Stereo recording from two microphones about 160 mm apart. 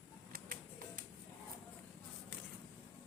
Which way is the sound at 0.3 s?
65° right (ahead or behind).